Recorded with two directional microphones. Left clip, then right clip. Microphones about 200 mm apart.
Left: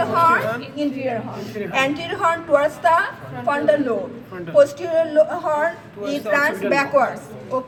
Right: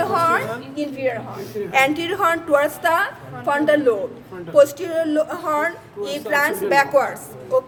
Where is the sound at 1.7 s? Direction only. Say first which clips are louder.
Right 3 dB; 45° right (ahead or behind).